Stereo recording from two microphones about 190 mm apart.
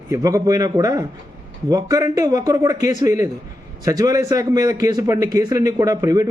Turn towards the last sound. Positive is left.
turn(degrees=-20)  # may be behind; listen again after turning